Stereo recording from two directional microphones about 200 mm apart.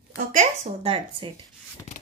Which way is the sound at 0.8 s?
30° right (ahead or behind).